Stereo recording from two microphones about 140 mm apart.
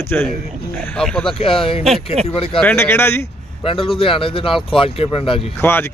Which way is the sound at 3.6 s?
40° left (ahead or behind).